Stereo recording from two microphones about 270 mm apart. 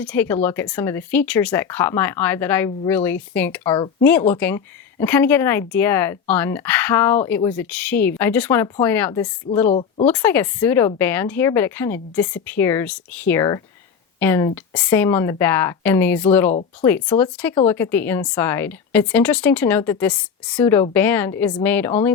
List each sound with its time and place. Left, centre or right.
0.0 s speech: centre
9.6 s speech: left
10.1 s speech: centre